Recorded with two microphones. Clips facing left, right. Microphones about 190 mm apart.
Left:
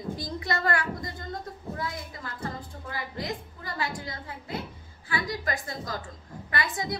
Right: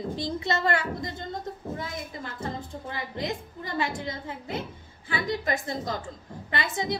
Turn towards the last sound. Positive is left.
turn(degrees=-25)  # may be behind; listen again after turning